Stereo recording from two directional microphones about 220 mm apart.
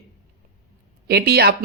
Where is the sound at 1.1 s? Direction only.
45° right (ahead or behind).